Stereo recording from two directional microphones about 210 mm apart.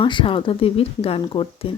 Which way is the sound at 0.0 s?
25° left (ahead or behind).